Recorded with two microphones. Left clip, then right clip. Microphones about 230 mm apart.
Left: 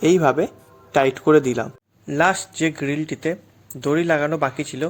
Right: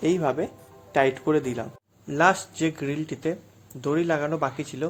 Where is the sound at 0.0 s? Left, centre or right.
Left.